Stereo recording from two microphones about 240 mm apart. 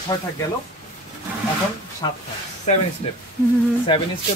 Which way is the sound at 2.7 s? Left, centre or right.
Left.